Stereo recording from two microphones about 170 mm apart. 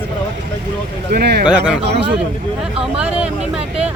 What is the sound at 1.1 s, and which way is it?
Speech, 70° right (ahead or behind).